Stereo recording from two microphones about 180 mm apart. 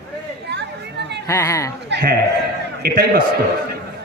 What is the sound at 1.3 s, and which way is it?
Speech, 15° left (ahead or behind).